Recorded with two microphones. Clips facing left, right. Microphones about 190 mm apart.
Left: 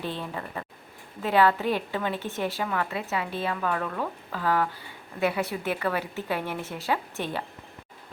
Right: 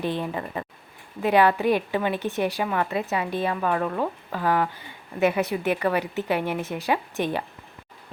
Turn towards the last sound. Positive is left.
turn(degrees=-15)  # may be behind; listen again after turning